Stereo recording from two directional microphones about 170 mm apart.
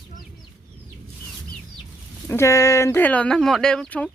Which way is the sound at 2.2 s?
15° left (ahead or behind).